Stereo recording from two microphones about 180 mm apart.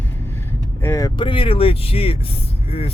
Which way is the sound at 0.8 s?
15° left (ahead or behind).